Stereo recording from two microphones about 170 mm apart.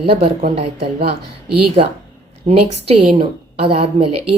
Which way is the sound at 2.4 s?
35° right (ahead or behind).